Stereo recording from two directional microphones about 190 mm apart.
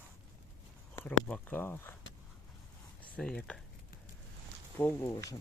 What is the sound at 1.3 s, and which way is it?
Speech, 10° left (ahead or behind).